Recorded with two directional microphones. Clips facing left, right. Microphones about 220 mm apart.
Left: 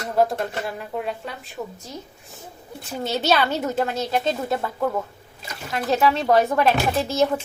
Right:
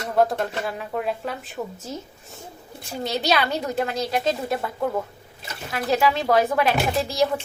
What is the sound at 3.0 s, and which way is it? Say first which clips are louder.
Speech: left 2 dB; 5° left (ahead or behind).